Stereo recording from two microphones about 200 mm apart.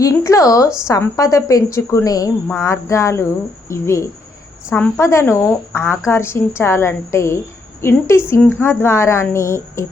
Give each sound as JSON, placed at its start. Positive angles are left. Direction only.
{"t": 0.0, "sound": "a woman's voice", "side_deg": 15}